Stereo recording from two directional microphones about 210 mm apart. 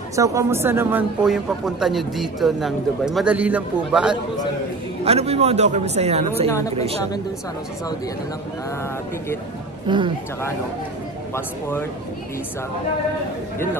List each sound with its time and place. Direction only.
0.1 s a man's voice: 15° right (ahead or behind)
5.0 s speech: 30° right (ahead or behind)
9.8 s speech: 25° right (ahead or behind)